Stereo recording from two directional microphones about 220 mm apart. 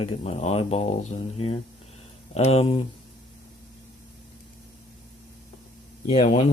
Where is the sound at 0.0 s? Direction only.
30° left (ahead or behind).